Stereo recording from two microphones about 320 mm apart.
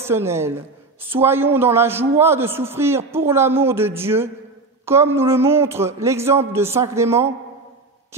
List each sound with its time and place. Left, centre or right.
0.0 s a man's voice: centre